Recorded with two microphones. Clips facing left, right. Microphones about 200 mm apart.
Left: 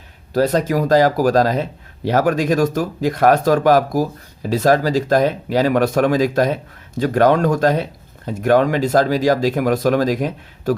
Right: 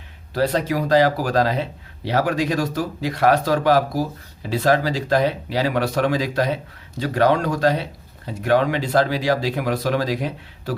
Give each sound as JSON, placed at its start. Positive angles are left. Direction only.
{"t": 0.3, "sound": "speech", "side_deg": 45}